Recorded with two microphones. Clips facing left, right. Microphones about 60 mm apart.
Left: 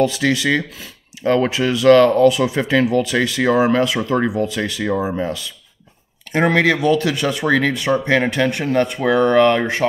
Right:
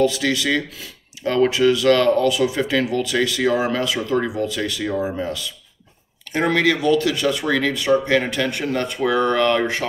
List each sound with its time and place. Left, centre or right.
0.0 s speech: left